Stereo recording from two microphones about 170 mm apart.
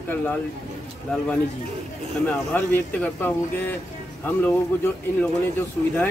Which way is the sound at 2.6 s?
10° left (ahead or behind).